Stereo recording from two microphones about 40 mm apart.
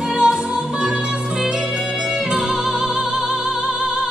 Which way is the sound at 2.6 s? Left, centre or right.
Centre.